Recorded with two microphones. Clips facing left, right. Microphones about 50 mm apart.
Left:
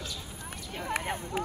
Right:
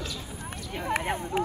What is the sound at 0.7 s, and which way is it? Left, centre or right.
Speech, right.